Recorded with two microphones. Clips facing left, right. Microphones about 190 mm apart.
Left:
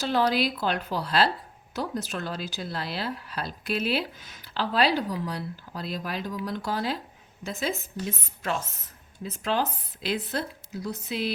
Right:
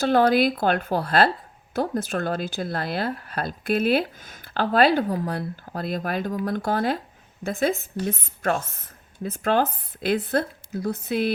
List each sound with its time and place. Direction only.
0.0 s speech: 55° right (ahead or behind)